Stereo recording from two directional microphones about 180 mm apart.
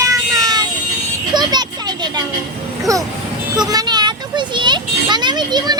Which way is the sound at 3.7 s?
20° right (ahead or behind).